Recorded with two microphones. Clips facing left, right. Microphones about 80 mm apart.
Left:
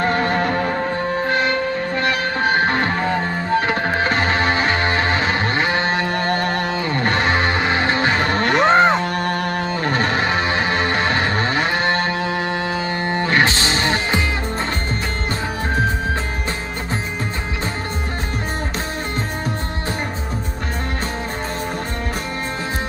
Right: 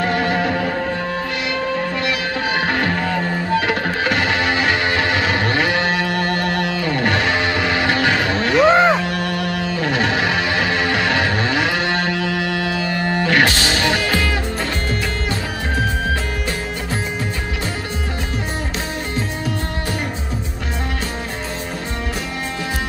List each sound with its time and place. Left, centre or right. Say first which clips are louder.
0.0 s music: even; left